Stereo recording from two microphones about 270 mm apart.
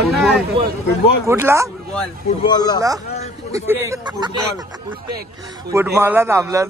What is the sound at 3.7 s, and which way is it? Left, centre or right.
Speech, centre.